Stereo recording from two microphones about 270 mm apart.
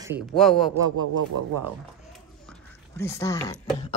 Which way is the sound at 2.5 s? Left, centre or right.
Centre.